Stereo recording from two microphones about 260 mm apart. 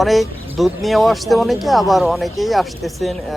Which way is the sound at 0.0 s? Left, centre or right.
Centre.